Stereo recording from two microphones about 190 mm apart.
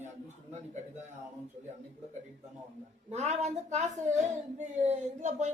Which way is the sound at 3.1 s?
35° right (ahead or behind).